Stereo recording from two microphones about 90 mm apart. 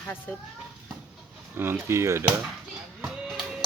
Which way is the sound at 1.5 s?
25° right (ahead or behind).